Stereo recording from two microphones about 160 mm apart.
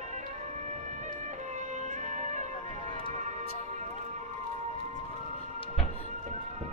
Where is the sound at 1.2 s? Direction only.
50° right (ahead or behind).